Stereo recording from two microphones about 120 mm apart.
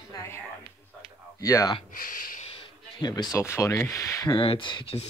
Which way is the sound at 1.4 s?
25° left (ahead or behind).